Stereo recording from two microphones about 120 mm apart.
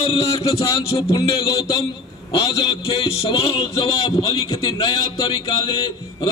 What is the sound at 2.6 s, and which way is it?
A man's voice, 45° left (ahead or behind).